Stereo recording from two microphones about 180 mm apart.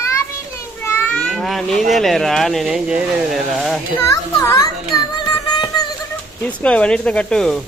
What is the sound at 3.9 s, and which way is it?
Child singing, 15° left (ahead or behind).